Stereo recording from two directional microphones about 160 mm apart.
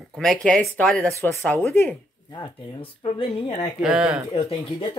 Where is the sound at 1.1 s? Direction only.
20° left (ahead or behind).